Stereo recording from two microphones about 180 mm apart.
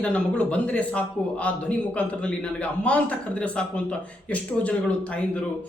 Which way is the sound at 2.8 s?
5° left (ahead or behind).